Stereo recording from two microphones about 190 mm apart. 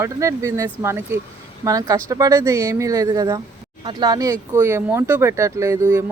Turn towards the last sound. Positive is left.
turn(degrees=-15)  # may be behind; listen again after turning